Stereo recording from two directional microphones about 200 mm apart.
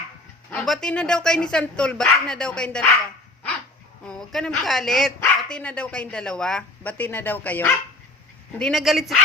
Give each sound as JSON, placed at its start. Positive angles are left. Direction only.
{"t": 0.5, "sound": "speech", "side_deg": 0}
{"t": 4.0, "sound": "speech", "side_deg": 0}